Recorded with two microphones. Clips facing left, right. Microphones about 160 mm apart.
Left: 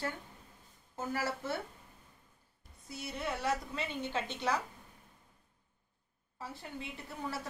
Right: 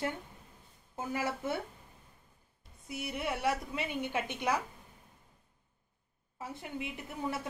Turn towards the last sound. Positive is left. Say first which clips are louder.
# right 3 dB
turn(degrees=-20)  # may be behind; listen again after turning